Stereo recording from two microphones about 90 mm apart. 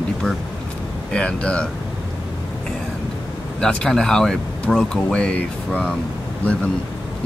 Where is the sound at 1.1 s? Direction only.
10° left (ahead or behind).